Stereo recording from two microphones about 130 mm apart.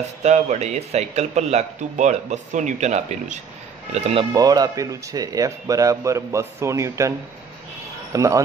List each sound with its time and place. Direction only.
0.2 s a man's voice: 60° right (ahead or behind)
3.9 s speech: 50° right (ahead or behind)
4.3 s speech: 30° right (ahead or behind)